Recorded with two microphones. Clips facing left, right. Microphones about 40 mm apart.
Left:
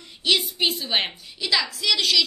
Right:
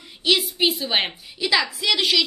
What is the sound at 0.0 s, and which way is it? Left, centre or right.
A woman's voice, centre.